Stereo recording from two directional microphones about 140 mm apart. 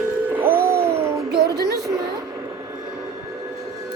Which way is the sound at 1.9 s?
25° right (ahead or behind).